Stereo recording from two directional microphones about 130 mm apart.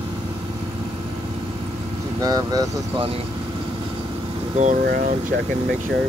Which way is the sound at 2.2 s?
30° right (ahead or behind).